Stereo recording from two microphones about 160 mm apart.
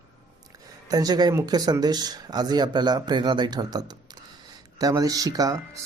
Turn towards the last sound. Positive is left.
turn(degrees=-20)  # may be behind; listen again after turning